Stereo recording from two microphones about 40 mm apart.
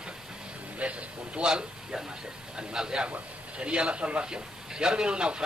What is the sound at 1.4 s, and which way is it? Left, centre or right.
A man's voice, centre.